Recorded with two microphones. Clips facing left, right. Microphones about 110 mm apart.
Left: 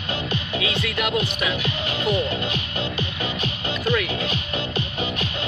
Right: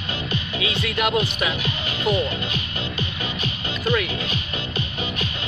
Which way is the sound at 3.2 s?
60° left (ahead or behind).